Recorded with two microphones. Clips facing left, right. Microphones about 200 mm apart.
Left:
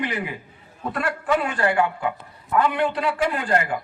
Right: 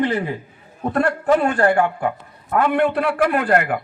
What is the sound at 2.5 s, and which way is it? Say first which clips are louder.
A man's voice: right 4 dB; 55° right (ahead or behind).